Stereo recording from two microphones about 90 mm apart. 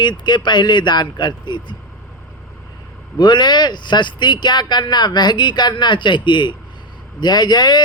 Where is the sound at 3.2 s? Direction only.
55° left (ahead or behind).